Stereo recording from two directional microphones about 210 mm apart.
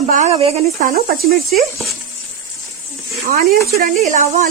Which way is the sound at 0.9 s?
45° right (ahead or behind).